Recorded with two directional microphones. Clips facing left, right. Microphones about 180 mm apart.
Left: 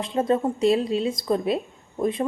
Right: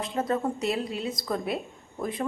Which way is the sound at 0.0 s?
25° left (ahead or behind).